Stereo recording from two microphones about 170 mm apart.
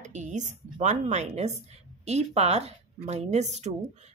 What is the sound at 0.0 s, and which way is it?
Speech, 45° right (ahead or behind).